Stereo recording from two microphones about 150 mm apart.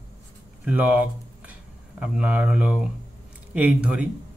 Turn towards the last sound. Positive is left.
turn(degrees=-5)  # may be behind; listen again after turning